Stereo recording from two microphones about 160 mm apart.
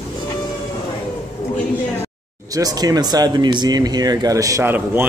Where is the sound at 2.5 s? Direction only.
25° right (ahead or behind).